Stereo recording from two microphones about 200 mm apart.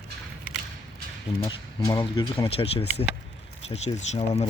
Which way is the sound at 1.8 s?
20° left (ahead or behind).